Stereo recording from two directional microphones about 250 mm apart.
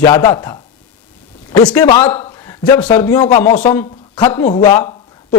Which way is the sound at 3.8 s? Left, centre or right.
Centre.